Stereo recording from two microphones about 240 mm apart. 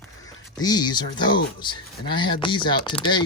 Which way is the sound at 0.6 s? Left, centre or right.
Centre.